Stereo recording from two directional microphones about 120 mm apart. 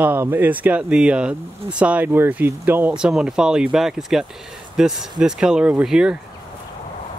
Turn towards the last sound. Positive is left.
turn(degrees=-5)  # may be behind; listen again after turning